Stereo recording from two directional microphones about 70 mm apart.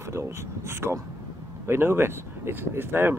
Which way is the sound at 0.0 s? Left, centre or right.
Right.